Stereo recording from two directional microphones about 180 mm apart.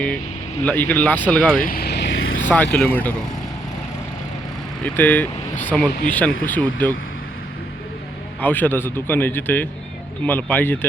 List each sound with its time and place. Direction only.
0.6 s speech: 10° left (ahead or behind)
1.6 s vehicle: 55° left (ahead or behind); by 2.4 s 90° left
2.4 s vehicle: 10° left (ahead or behind)
2.8 s speech: 10° left (ahead or behind)
4.9 s speech: 10° left (ahead or behind)
8.4 s speech: 10° left (ahead or behind)